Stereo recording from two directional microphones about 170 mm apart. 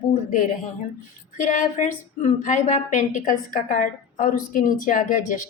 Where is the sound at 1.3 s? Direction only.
50° left (ahead or behind).